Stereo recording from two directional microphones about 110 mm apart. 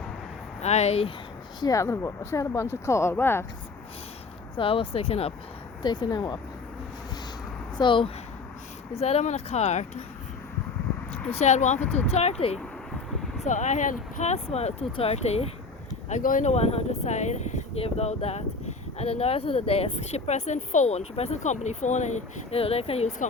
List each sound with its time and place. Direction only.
0.6 s speech: 85° left; by 1.1 s 70° left (ahead or behind)
1.6 s speech: 30° left (ahead or behind)
4.5 s speech: 55° left (ahead or behind)
5.8 s speech: 45° left (ahead or behind)
7.8 s speech: 50° left (ahead or behind)
8.9 s speech: 70° left (ahead or behind); by 10.0 s 90° left
11.3 s speech: 85° left
11.8 s speech: 15° left (ahead or behind)
12.0 s speech: 75° left (ahead or behind)
13.4 s speech: 90° left; by 15.4 s 75° left (ahead or behind)
16.0 s speech: 90° left
18.9 s speech: 65° left (ahead or behind)